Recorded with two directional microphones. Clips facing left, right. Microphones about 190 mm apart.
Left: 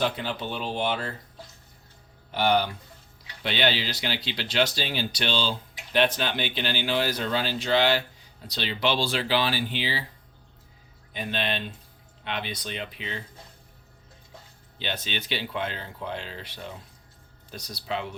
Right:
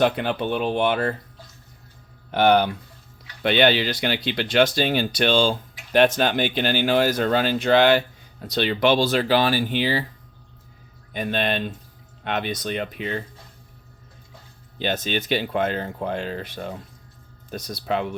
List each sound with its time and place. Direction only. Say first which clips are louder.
0.0 s speech: right 7 dB; 60° right (ahead or behind)
2.3 s speech: right 6 dB; 55° right (ahead or behind)
11.1 s speech: right 6 dB; 50° right (ahead or behind)
14.8 s speech: right 8 dB; 45° right (ahead or behind)